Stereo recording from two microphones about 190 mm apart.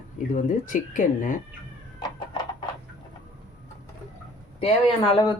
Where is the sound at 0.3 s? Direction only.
40° left (ahead or behind).